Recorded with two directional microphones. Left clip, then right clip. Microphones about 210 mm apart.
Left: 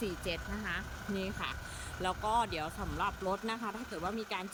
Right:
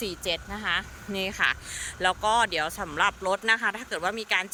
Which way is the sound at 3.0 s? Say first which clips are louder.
Right 10 dB; 30° right (ahead or behind).